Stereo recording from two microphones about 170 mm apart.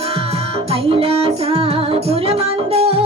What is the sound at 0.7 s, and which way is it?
Music, 35° right (ahead or behind).